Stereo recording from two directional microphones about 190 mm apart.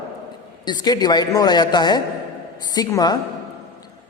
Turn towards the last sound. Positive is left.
turn(degrees=20)  # may be behind; listen again after turning